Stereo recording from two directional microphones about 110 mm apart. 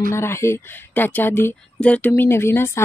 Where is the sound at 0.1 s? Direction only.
25° left (ahead or behind).